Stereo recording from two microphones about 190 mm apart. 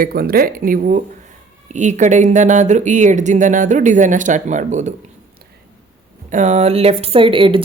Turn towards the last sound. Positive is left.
turn(degrees=-25)  # may be behind; listen again after turning